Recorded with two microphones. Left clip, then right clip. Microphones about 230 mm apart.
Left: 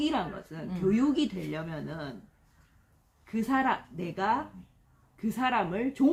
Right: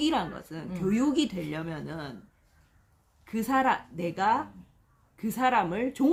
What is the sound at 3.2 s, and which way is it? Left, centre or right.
Speech, right.